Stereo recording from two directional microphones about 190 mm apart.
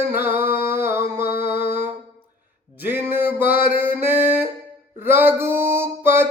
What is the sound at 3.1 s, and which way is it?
Music, 10° right (ahead or behind).